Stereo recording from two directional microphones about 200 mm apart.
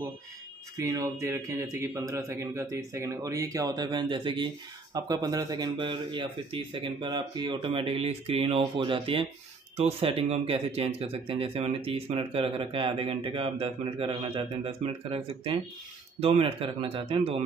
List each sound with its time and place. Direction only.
0.7 s a man's voice: 15° right (ahead or behind)